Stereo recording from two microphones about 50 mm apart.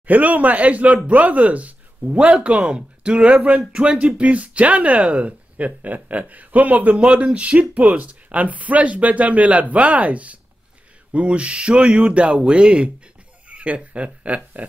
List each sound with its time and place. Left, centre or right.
0.0 s speech: right
2.4 s speech: right